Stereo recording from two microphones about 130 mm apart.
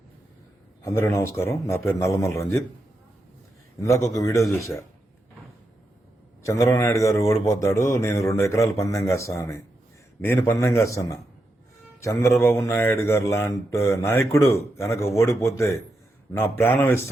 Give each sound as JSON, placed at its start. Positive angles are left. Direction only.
{"t": 0.8, "sound": "speech", "side_deg": 20}
{"t": 3.8, "sound": "speech", "side_deg": 25}
{"t": 6.4, "sound": "speech", "side_deg": 20}